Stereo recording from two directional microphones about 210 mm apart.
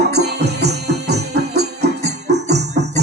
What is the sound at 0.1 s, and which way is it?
Music, 50° right (ahead or behind).